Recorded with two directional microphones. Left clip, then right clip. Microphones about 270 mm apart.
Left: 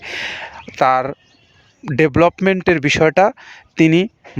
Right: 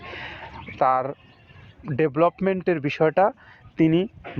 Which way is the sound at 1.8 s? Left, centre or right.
Left.